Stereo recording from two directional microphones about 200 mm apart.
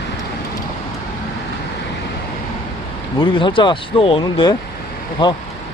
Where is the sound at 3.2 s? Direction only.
25° left (ahead or behind).